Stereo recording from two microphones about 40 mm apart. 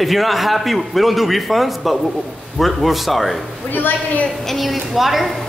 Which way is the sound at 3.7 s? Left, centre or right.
Left.